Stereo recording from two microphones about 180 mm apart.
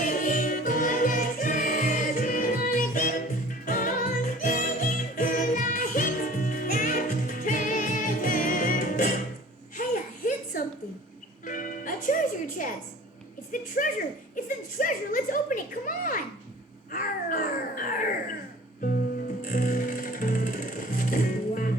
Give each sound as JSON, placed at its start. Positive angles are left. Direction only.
{"t": 0.0, "sound": "music", "side_deg": 45}
{"t": 9.7, "sound": "a sound", "side_deg": 45}
{"t": 11.4, "sound": "music", "side_deg": 50}
{"t": 13.5, "sound": "a sound", "side_deg": 50}
{"t": 16.9, "sound": "babbling", "side_deg": 50}
{"t": 19.4, "sound": "music", "side_deg": 50}